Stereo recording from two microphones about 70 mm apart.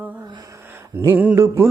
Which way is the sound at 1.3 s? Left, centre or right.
Right.